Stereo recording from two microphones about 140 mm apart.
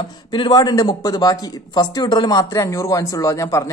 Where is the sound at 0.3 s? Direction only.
30° left (ahead or behind).